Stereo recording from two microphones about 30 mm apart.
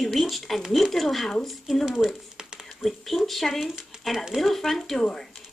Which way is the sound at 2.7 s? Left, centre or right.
Centre.